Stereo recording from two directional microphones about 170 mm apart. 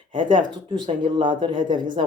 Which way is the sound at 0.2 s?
30° right (ahead or behind).